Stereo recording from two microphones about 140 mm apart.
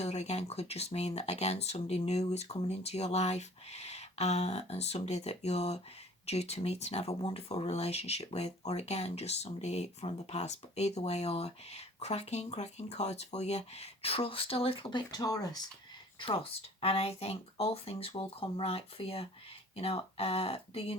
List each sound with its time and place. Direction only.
0.0 s speech: 50° left (ahead or behind); by 15.6 s 25° left (ahead or behind)
16.2 s speech: 40° left (ahead or behind)